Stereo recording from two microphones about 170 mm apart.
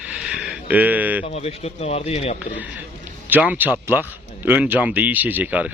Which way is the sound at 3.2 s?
10° right (ahead or behind).